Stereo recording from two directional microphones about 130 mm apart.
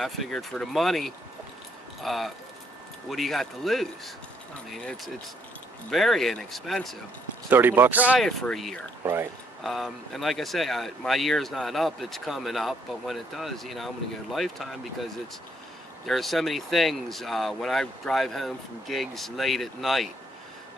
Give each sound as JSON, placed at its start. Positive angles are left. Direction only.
{"t": 0.0, "sound": "speech", "side_deg": 0}
{"t": 7.4, "sound": "speech", "side_deg": -15}
{"t": 8.2, "sound": "speech", "side_deg": 5}
{"t": 9.0, "sound": "speech", "side_deg": -20}
{"t": 9.6, "sound": "speech", "side_deg": 0}